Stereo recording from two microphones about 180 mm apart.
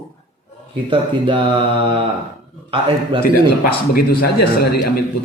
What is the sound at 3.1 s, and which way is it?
Mantra, 30° right (ahead or behind).